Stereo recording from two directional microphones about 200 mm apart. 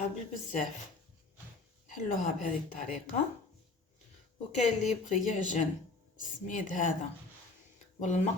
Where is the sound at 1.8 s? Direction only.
40° left (ahead or behind).